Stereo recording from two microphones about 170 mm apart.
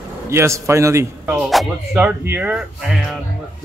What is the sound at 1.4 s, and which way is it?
Speech, centre (ahead or behind).